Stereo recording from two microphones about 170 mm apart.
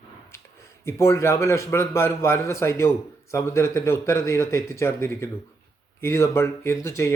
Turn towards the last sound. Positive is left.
turn(degrees=15)  # may be behind; listen again after turning